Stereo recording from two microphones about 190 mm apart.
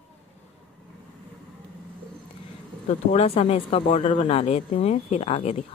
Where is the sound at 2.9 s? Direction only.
35° left (ahead or behind).